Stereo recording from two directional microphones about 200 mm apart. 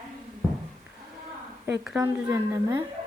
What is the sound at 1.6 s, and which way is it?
A woman's voice, 10° right (ahead or behind).